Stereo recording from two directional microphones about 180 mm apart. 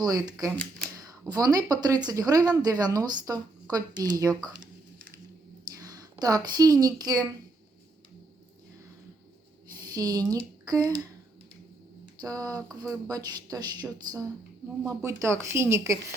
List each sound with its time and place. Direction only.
0.0 s a woman's voice: 20° right (ahead or behind)
9.8 s speech: 20° right (ahead or behind)
12.2 s a woman's voice: 20° right (ahead or behind)
14.8 s speech: 15° right (ahead or behind)